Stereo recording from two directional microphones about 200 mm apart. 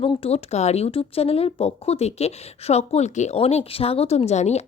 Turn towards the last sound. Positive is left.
turn(degrees=35)  # may be behind; listen again after turning